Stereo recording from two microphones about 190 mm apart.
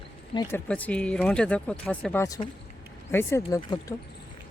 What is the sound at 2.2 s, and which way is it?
Speech, 20° left (ahead or behind).